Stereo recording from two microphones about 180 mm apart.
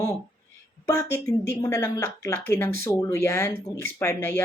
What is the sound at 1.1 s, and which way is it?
Speech, 15° left (ahead or behind).